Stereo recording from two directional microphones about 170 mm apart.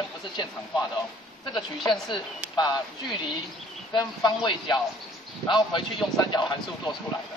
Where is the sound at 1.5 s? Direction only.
Centre (ahead or behind).